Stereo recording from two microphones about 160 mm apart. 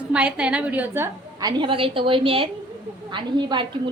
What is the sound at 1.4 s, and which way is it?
A woman's voice, 30° right (ahead or behind).